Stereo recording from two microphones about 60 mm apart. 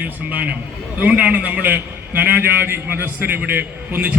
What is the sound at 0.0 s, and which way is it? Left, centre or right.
A man's voice, right.